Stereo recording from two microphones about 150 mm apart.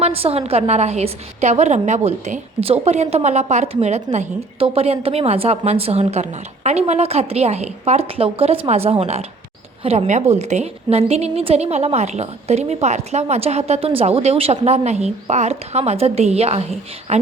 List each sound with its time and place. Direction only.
0.0 s a woman's voice: 40° right (ahead or behind)